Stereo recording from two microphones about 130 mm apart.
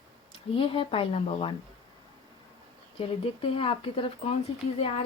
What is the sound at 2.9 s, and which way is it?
A woman's voice, 45° left (ahead or behind).